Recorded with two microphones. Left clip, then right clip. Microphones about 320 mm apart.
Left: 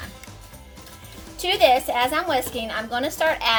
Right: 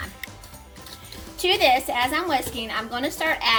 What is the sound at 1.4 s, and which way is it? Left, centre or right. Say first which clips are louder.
A woman's voice: left 1 dB; centre.